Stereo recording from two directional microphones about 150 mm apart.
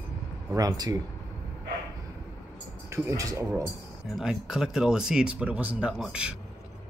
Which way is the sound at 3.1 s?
20° right (ahead or behind).